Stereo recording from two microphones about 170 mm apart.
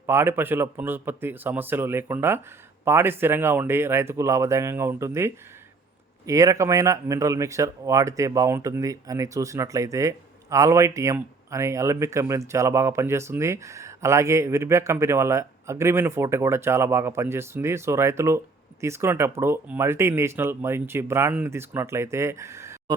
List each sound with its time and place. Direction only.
0.0 s speech: 15° right (ahead or behind)